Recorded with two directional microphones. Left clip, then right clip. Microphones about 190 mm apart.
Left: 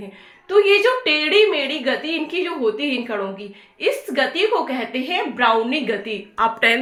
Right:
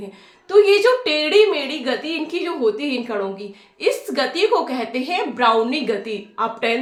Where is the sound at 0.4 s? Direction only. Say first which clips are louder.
Right 1 dB; 5° right (ahead or behind).